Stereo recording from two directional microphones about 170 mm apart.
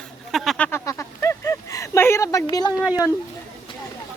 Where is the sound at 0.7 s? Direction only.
15° left (ahead or behind).